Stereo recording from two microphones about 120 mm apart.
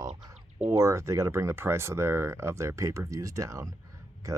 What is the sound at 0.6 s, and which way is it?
Speech, 25° right (ahead or behind).